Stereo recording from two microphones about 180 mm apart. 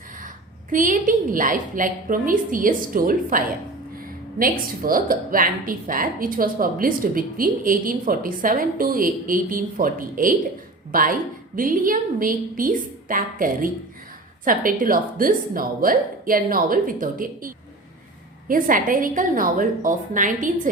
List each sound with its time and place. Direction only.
0.7 s a woman's voice: 50° right (ahead or behind)